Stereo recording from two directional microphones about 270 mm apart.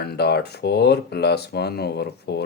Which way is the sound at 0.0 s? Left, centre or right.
Left.